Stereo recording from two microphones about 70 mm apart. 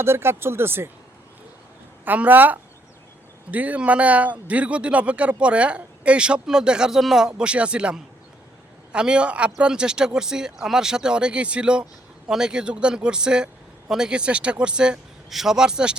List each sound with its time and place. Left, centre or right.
0.0 s speech: right
2.0 s speech: right